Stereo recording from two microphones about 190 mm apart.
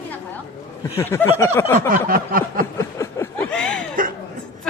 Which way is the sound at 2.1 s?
50° right (ahead or behind).